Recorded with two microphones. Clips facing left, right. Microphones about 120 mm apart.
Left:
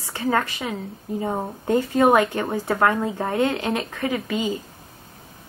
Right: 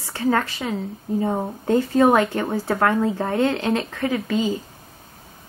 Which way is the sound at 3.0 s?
15° left (ahead or behind).